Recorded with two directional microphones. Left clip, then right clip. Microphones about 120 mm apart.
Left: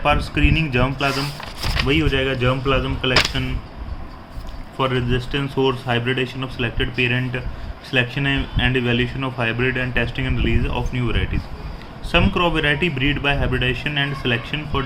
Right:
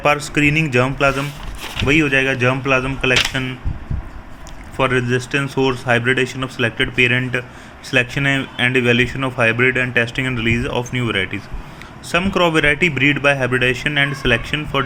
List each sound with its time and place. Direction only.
0.0 s speech: 40° right (ahead or behind)
4.8 s speech: 50° right (ahead or behind)